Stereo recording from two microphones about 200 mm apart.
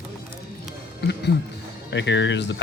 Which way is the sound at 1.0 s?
55° left (ahead or behind).